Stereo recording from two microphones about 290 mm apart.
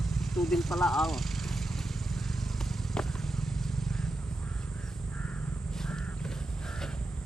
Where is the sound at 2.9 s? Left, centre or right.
Centre.